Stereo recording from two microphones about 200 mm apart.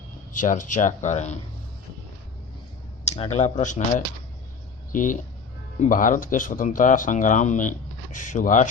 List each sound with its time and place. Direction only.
0.3 s speech: 40° left (ahead or behind)
3.1 s speech: 35° left (ahead or behind)